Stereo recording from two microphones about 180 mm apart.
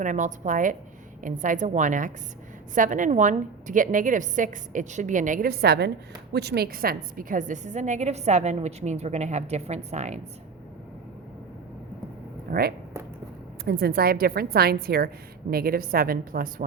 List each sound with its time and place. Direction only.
0.0 s a woman's voice: 45° right (ahead or behind)
12.5 s a woman's voice: 60° right (ahead or behind)